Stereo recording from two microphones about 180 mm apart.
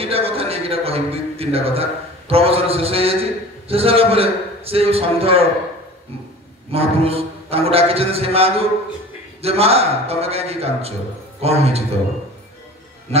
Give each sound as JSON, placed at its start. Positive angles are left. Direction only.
{"t": 0.0, "sound": "a man's voice", "side_deg": -35}
{"t": 6.7, "sound": "a man's voice", "side_deg": -35}